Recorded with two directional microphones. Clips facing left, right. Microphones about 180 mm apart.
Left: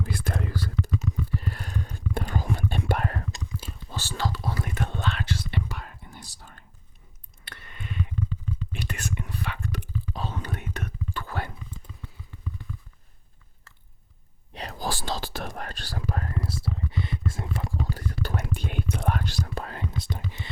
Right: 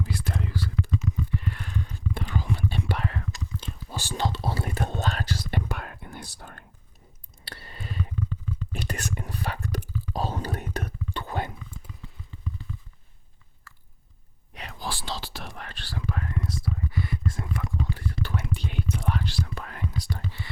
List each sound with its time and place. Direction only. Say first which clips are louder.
0.0 s whispering: left 1 dB; 50° left (ahead or behind)
3.8 s whispering: right 2 dB; 15° right (ahead or behind); by 6.7 s 60° right (ahead or behind)
7.4 s a sound: right 1 dB; 35° right (ahead or behind)
8.8 s whispering: right 1 dB; 40° right (ahead or behind)
11.1 s a sound: right 4 dB; 20° right (ahead or behind)
13.7 s chewing: right 4 dB; 25° left (ahead or behind)
14.5 s whispering: left 4 dB; 40° left (ahead or behind); by 20.5 s 20° left (ahead or behind)